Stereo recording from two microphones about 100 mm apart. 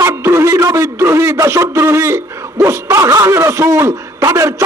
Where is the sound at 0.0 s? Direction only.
30° right (ahead or behind).